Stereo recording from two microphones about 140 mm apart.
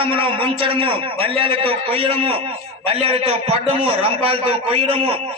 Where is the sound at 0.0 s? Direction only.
40° right (ahead or behind).